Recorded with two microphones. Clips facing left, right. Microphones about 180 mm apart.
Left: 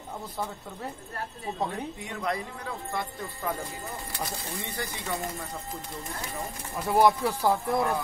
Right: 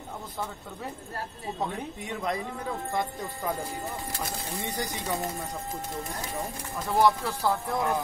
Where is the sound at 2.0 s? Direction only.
20° right (ahead or behind).